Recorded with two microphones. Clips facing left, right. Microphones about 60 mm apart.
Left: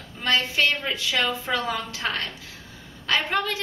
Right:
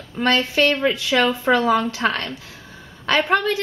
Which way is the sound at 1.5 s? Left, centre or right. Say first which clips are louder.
Right 9 dB; right.